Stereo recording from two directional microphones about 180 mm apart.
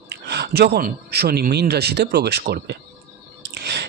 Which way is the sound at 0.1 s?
65° right (ahead or behind).